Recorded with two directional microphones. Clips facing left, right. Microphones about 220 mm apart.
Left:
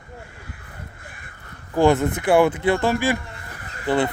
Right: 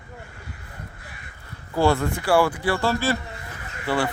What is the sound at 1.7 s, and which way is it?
Speech, 20° left (ahead or behind).